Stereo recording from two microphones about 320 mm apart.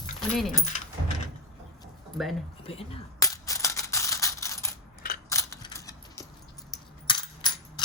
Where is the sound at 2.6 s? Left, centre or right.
Centre.